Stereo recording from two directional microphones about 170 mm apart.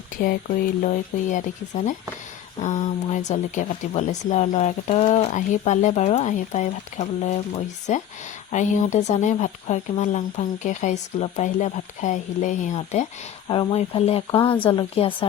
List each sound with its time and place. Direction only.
0.2 s speech: 55° left (ahead or behind)
13.5 s speech: 30° left (ahead or behind)
14.3 s speech: 25° left (ahead or behind)